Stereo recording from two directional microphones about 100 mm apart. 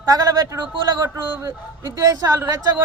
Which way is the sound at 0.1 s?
35° right (ahead or behind).